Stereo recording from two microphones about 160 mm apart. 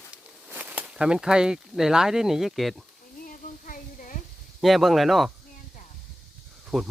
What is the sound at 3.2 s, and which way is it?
Child singing, 60° left (ahead or behind).